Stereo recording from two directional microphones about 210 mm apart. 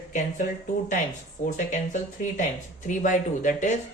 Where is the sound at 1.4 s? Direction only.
35° left (ahead or behind).